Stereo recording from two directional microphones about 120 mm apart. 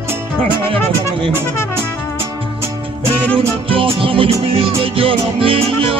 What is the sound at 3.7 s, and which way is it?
Music, 50° right (ahead or behind).